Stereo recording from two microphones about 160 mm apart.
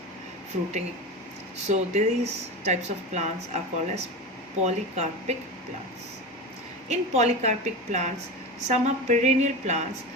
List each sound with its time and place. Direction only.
1.6 s speech: 45° right (ahead or behind)
6.8 s speech: 45° right (ahead or behind)